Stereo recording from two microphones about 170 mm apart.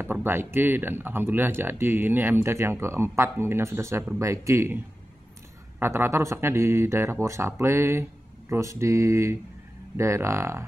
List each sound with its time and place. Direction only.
0.0 s speech: 15° right (ahead or behind)